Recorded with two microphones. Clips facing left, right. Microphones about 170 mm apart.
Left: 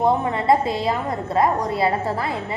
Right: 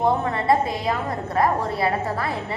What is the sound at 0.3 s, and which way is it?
A woman's voice, 25° left (ahead or behind).